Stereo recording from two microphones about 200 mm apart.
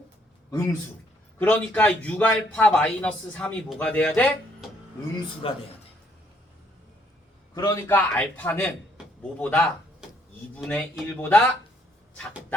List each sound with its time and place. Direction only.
0.5 s a man's voice: 15° left (ahead or behind)
5.4 s speech: 25° left (ahead or behind)
7.5 s a man's voice: 15° left (ahead or behind)